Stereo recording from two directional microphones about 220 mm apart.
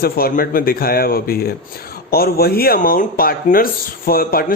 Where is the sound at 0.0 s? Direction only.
40° left (ahead or behind).